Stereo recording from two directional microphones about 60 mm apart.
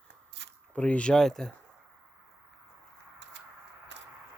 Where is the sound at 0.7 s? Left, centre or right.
Centre.